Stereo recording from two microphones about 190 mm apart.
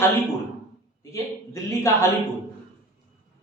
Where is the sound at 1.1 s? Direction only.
15° left (ahead or behind).